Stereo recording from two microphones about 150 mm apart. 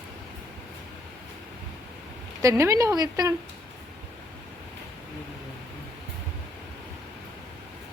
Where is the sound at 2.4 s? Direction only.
20° right (ahead or behind).